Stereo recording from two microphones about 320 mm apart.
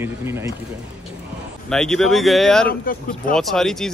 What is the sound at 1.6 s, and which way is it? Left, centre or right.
Speech, centre.